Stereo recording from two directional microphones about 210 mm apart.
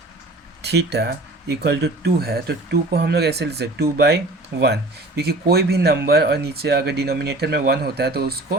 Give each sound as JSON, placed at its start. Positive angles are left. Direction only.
{"t": 0.6, "sound": "a man's voice", "side_deg": -50}